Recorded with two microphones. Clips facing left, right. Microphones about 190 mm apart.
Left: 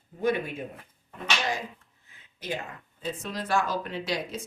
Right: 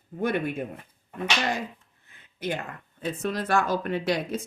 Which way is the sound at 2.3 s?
60° right (ahead or behind).